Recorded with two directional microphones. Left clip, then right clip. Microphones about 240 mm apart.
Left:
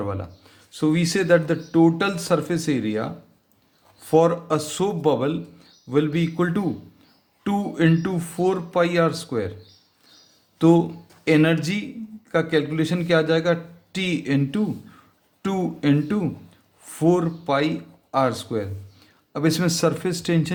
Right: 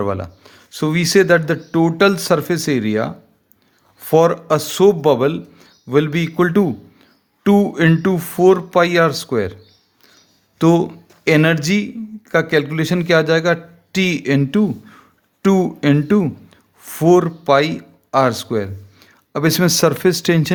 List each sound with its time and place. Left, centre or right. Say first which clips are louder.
0.0 s speech: right 8 dB; right
10.6 s a man's voice: right 3 dB; right